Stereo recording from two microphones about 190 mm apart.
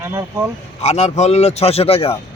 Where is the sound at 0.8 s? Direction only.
35° left (ahead or behind).